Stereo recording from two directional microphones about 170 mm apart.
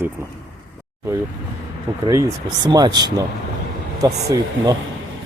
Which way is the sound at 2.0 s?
20° right (ahead or behind).